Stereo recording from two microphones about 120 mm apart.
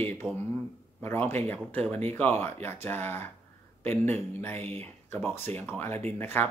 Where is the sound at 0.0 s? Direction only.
15° left (ahead or behind).